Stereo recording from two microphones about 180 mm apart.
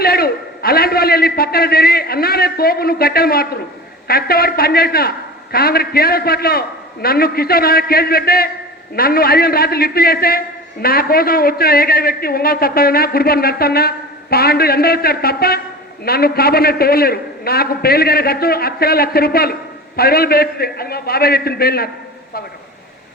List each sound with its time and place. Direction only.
0.0 s a man's voice: 55° left (ahead or behind)